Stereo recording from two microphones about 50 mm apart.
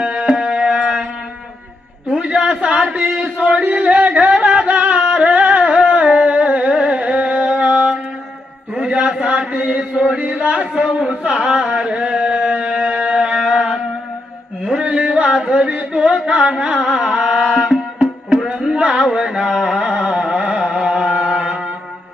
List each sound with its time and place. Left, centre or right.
0.0 s music: right
2.1 s a sound: centre
3.3 s music: right
5.6 s carnatic music: right
8.7 s a sound: centre
9.5 s chant: right
14.8 s music: right
18.4 s a sound: centre
19.4 s carnatic music: centre